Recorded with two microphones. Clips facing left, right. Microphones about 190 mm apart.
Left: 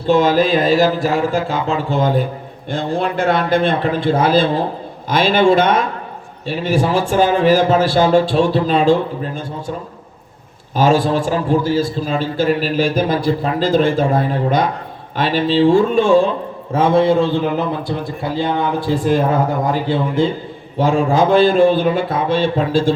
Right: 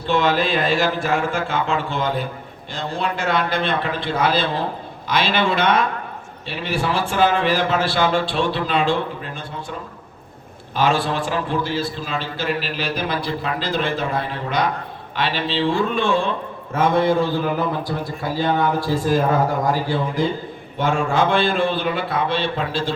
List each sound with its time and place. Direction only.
0.1 s a man's voice: 40° left (ahead or behind)
10.8 s a man's voice: 45° left (ahead or behind)
16.7 s a man's voice: 30° left (ahead or behind); by 22.9 s 45° left (ahead or behind)